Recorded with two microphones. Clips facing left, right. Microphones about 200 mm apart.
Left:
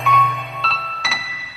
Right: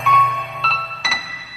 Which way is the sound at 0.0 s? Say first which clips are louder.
Even; centre (ahead or behind).